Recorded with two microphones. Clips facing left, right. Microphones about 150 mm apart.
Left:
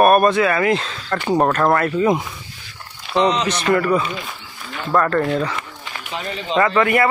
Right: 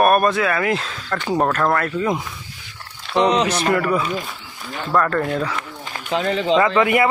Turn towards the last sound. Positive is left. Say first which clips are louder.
# even
turn(degrees=-10)  # may be behind; listen again after turning